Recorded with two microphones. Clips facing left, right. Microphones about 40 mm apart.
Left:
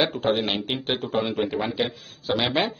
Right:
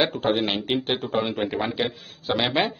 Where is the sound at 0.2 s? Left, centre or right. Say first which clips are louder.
Even; centre.